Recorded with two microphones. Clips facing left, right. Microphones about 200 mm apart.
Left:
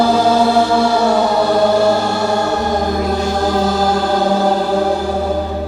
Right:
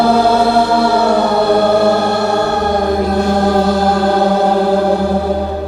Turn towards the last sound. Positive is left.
turn(degrees=-60)  # may be behind; listen again after turning